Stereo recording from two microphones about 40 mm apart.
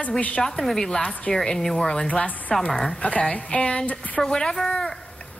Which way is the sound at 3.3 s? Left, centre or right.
Left.